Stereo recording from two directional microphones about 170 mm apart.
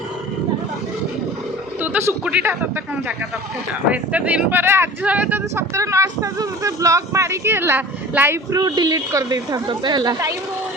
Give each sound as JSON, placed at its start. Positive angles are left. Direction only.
{"t": 1.8, "sound": "speech", "side_deg": -10}